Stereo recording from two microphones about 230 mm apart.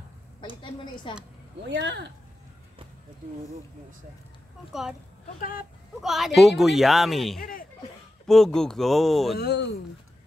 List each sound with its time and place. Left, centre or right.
0.6 s a woman's voice: left
1.6 s speech: right
5.4 s speech: left
5.9 s speech: centre
9.4 s speech: left